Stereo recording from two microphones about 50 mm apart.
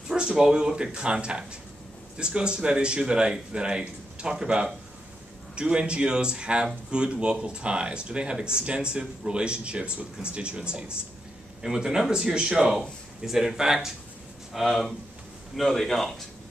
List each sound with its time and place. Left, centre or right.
0.1 s speech: centre
14.5 s speech: centre